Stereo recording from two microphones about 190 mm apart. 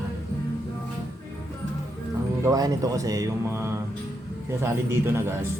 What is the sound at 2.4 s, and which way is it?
Speech, 20° right (ahead or behind).